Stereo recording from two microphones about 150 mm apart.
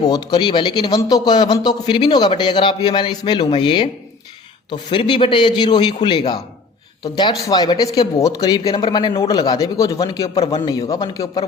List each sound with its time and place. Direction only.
0.0 s a man's voice: 25° left (ahead or behind)